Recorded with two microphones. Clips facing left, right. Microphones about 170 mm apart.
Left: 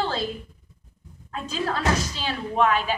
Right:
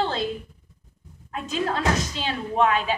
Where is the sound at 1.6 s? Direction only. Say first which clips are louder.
Even; 20° right (ahead or behind).